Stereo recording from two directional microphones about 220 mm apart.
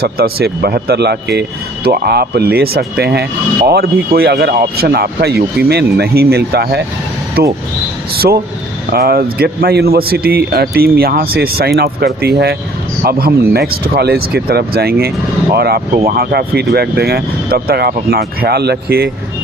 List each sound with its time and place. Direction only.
0.0 s speech: 45° right (ahead or behind)